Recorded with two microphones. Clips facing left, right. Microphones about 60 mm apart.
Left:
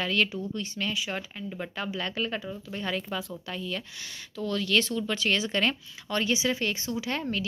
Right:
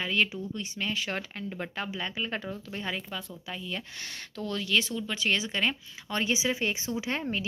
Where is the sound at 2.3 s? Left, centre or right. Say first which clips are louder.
Left 1 dB; right.